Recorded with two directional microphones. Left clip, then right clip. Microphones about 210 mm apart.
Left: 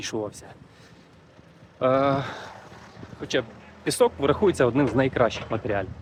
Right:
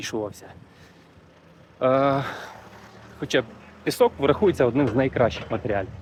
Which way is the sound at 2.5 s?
55° right (ahead or behind).